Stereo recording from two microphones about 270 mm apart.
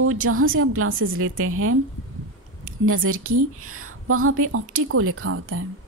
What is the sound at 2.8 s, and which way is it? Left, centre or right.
A woman's voice, right.